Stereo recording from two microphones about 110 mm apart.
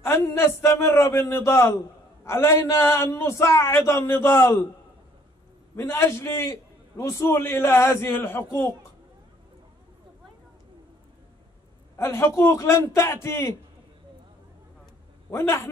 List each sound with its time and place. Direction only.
0.0 s a man's voice: 25° left (ahead or behind)
5.8 s a man's voice: 25° left (ahead or behind)
12.0 s a man's voice: 25° left (ahead or behind)
15.2 s a man's voice: 20° left (ahead or behind)